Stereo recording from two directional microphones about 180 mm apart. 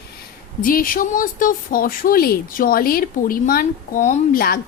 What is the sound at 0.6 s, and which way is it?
Speech, 50° left (ahead or behind).